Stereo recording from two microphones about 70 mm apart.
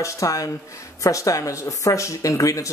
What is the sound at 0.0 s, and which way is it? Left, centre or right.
Speech, left.